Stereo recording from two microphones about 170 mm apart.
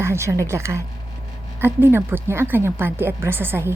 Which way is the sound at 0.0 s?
15° right (ahead or behind).